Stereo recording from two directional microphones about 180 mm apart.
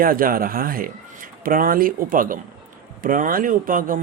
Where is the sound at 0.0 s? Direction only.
50° right (ahead or behind).